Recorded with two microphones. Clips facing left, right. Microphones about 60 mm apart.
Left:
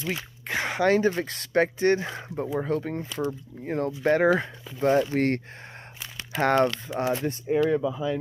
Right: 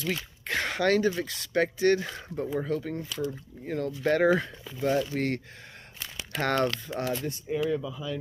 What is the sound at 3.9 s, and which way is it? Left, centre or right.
Speech, centre.